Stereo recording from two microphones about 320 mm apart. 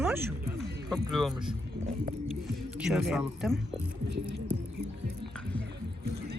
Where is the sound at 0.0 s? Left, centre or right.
Centre.